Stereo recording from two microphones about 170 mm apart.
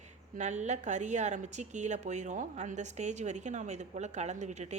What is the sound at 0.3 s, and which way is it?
A woman's voice, 45° right (ahead or behind).